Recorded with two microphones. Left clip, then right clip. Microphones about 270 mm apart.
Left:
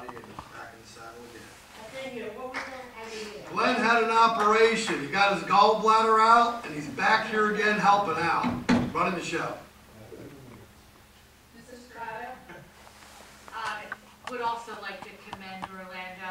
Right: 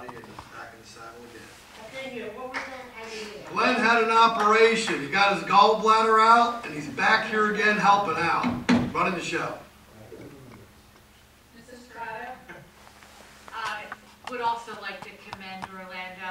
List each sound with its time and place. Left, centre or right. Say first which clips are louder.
1.3 s a woman's voice: right 1 dB; centre
11.9 s a sound: right 2 dB; centre
14.3 s a woman's voice: right 3 dB; centre